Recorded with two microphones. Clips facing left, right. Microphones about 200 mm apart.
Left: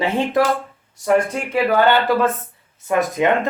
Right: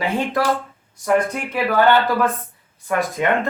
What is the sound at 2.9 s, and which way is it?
Speech, 20° left (ahead or behind).